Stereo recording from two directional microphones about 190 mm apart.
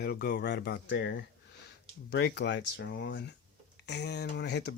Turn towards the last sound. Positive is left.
turn(degrees=60)  # may be behind; listen again after turning